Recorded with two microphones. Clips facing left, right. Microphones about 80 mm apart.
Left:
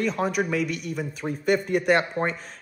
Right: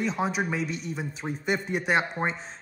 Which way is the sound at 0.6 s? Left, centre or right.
Left.